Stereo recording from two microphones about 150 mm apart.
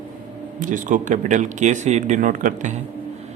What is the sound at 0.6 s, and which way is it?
Speech, 60° right (ahead or behind).